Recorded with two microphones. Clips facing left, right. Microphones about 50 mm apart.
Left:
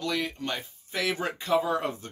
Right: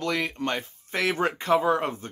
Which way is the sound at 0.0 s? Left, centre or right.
Right.